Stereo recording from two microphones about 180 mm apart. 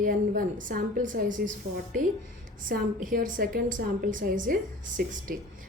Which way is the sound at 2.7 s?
50° right (ahead or behind).